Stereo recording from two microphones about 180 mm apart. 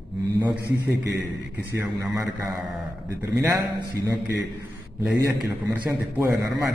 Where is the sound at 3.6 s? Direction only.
25° right (ahead or behind).